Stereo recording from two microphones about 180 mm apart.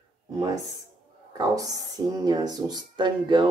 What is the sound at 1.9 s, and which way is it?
Speech, 20° right (ahead or behind).